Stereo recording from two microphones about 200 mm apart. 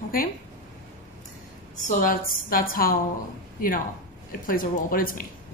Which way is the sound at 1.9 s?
40° left (ahead or behind).